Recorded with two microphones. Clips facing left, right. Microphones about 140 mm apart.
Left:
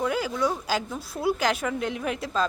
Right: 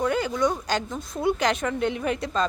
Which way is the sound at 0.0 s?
5° left (ahead or behind).